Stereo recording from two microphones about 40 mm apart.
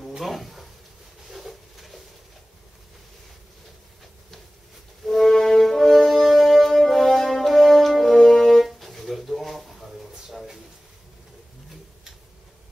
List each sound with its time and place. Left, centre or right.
0.0 s a sound: centre
5.0 s brass instrument: centre
8.4 s music: centre
10.3 s drawer open or close: centre